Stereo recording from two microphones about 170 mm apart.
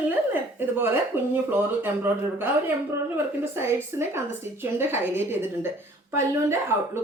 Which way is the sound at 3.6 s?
15° right (ahead or behind).